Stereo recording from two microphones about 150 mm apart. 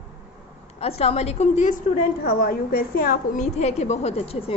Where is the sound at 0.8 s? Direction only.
45° left (ahead or behind).